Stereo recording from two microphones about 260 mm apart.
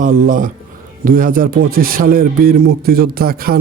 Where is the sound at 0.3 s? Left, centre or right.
Right.